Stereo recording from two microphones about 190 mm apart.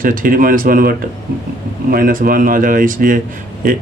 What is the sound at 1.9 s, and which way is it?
Speech, 50° right (ahead or behind).